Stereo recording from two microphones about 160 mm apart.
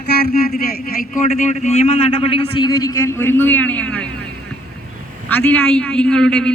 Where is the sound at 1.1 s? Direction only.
50° left (ahead or behind); by 4.0 s 10° left (ahead or behind).